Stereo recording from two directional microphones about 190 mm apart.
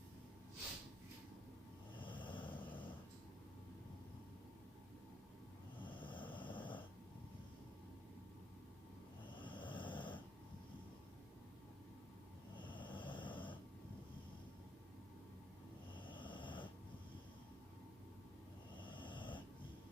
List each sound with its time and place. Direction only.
2.0 s vehicle: 25° left (ahead or behind)
5.8 s snoring: 25° left (ahead or behind)
9.3 s snoring: 25° left (ahead or behind)
12.5 s snoring: 25° left (ahead or behind)
16.0 s snoring: 25° left (ahead or behind)
18.8 s snoring: 25° left (ahead or behind)